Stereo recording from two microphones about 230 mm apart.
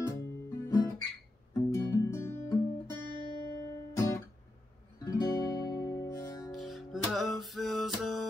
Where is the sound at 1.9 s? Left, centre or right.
Centre.